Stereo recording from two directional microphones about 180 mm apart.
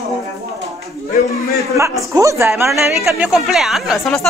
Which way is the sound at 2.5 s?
5° right (ahead or behind).